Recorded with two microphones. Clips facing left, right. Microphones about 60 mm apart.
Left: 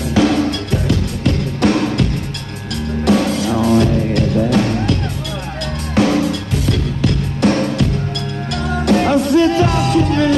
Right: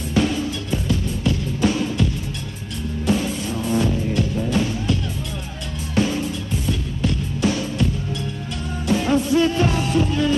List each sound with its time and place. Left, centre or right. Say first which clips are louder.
0.1 s music: left 7 dB; left
3.1 s music: left 7 dB; left
5.9 s music: left 7 dB; left
8.6 s music: left 6 dB; left